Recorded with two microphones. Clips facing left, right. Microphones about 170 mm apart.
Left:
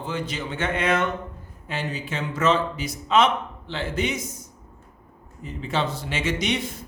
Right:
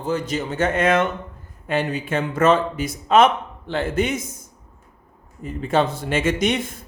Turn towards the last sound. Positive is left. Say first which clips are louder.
# right 5 dB
turn(degrees=-50)  # may be behind; listen again after turning